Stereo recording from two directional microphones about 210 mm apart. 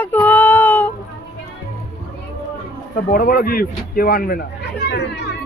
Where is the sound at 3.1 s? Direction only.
45° left (ahead or behind).